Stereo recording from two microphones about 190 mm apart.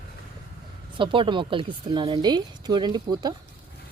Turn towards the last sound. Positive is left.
turn(degrees=-20)  # may be behind; listen again after turning